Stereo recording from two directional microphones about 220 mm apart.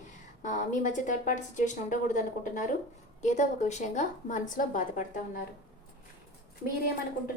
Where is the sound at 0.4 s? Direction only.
35° left (ahead or behind).